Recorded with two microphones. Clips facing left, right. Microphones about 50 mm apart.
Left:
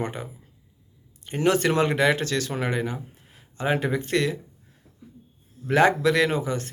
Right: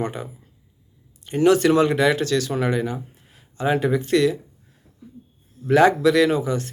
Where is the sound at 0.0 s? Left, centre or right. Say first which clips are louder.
Right 3 dB; left.